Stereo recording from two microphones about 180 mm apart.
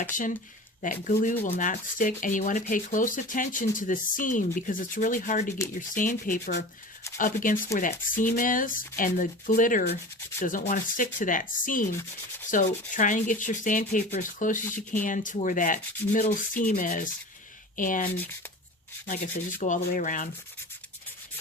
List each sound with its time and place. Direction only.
0.1 s speech: 45° left (ahead or behind)
14.6 s speech: 10° left (ahead or behind)
15.0 s speech: 45° left (ahead or behind)